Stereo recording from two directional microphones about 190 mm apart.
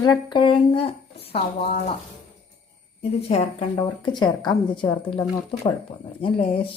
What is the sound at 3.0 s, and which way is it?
A woman's voice, 30° left (ahead or behind).